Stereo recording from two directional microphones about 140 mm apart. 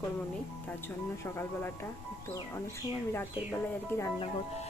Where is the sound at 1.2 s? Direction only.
15° left (ahead or behind).